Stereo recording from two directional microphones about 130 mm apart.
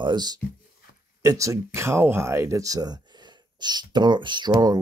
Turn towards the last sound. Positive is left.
turn(degrees=-35)  # may be behind; listen again after turning